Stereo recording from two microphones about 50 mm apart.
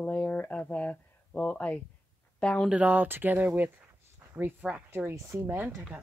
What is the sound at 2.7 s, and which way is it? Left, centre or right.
Speech, right.